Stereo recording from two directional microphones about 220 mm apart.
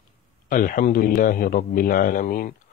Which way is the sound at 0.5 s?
40° left (ahead or behind).